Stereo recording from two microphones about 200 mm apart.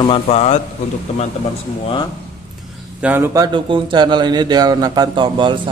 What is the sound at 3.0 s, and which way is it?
Speech, 10° right (ahead or behind).